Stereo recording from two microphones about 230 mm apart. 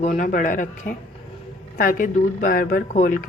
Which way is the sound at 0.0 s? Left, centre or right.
Left.